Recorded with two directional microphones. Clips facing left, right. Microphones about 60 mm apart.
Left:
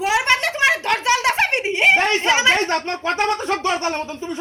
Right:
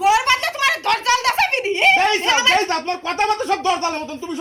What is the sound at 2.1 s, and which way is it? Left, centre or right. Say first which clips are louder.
A woman's voice: even; left.